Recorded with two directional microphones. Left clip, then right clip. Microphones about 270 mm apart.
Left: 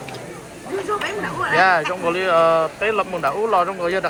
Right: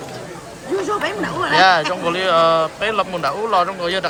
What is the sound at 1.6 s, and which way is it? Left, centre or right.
Speech, centre.